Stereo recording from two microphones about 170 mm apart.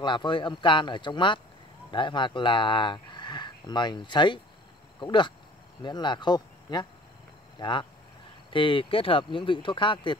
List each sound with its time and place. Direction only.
0.0 s speech: 25° left (ahead or behind)